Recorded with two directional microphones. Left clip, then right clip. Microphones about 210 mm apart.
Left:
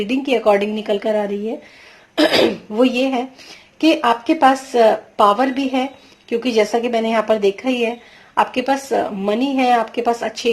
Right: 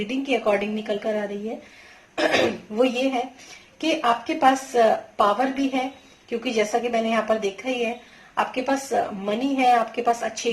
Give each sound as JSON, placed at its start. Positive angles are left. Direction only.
{"t": 0.1, "sound": "speech", "side_deg": 45}
{"t": 6.4, "sound": "speech", "side_deg": 45}